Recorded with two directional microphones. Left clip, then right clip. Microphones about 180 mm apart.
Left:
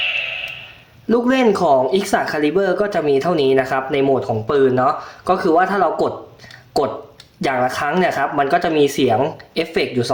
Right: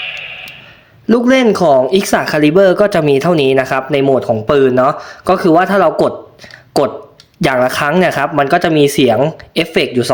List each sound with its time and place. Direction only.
1.0 s speech: 40° right (ahead or behind)
7.4 s speech: 45° right (ahead or behind)